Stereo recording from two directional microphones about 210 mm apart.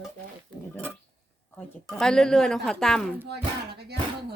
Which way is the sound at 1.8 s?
5° left (ahead or behind).